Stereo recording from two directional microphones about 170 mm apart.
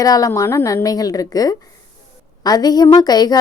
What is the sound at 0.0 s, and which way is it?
A woman's voice, 20° left (ahead or behind).